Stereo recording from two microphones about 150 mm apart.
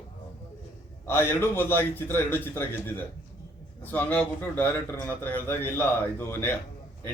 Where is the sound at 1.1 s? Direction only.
15° left (ahead or behind).